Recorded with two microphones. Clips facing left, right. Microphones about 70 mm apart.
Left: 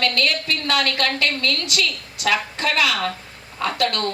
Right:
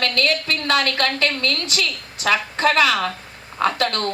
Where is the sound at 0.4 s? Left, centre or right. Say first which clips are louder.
Right 2 dB; right.